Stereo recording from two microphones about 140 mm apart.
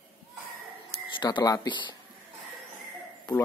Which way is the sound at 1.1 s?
35° left (ahead or behind).